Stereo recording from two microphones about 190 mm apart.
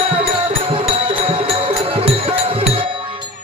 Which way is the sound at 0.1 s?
30° right (ahead or behind).